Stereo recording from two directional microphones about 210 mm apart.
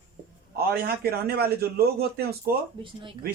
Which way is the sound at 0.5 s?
45° right (ahead or behind).